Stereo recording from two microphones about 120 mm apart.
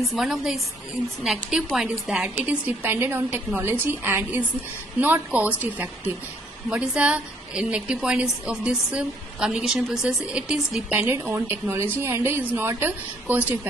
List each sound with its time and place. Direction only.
0.0 s a woman's voice: centre (ahead or behind)